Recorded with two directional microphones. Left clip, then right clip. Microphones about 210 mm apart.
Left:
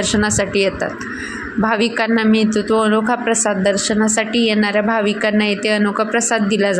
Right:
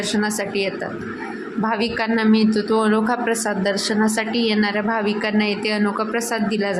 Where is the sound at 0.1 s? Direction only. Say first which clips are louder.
Left 5 dB; 20° left (ahead or behind).